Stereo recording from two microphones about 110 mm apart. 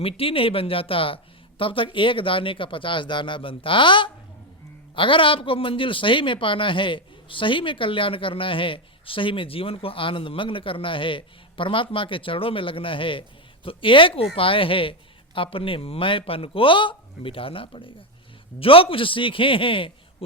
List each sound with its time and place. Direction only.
0.0 s a man's voice: 60° left (ahead or behind)